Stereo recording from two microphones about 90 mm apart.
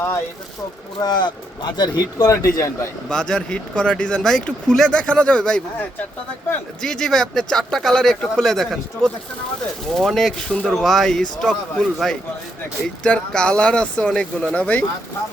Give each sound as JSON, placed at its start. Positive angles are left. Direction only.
{"t": 1.0, "sound": "a man's voice", "side_deg": 50}
{"t": 3.1, "sound": "speech", "side_deg": 10}
{"t": 6.8, "sound": "speech", "side_deg": 5}